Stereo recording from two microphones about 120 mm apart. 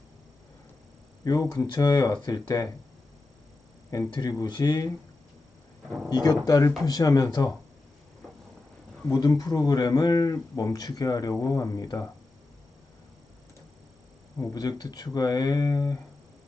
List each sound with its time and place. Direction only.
1.2 s speech: 30° left (ahead or behind)
4.1 s speech: 30° left (ahead or behind)
6.1 s speech: 35° left (ahead or behind)
9.0 s speech: 30° left (ahead or behind)
14.5 s speech: 35° left (ahead or behind)